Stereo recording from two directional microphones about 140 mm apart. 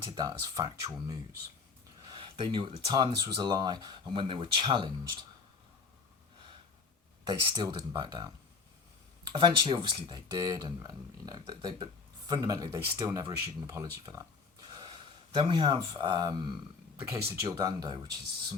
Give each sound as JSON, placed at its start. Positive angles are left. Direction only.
{"t": 0.2, "sound": "speech", "side_deg": -30}
{"t": 2.0, "sound": "speech", "side_deg": -35}
{"t": 7.3, "sound": "speech", "side_deg": -30}
{"t": 9.3, "sound": "speech", "side_deg": -35}
{"t": 14.8, "sound": "speech", "side_deg": -40}
{"t": 17.0, "sound": "speech", "side_deg": -15}
{"t": 17.6, "sound": "speech", "side_deg": -30}